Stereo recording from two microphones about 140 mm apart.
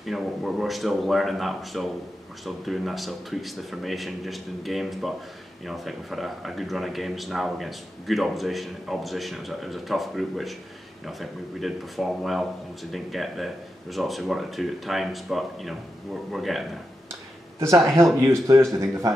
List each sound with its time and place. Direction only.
0.0 s speech: centre (ahead or behind)
18.2 s a man's voice: 20° right (ahead or behind)